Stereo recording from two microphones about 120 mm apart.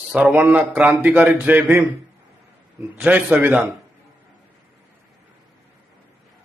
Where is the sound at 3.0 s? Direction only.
10° right (ahead or behind).